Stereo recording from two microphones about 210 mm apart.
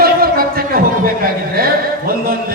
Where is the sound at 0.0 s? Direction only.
45° right (ahead or behind).